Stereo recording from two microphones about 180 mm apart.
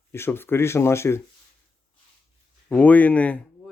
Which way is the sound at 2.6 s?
10° left (ahead or behind).